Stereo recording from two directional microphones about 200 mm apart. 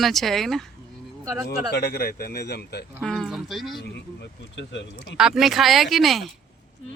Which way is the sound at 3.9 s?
60° left (ahead or behind).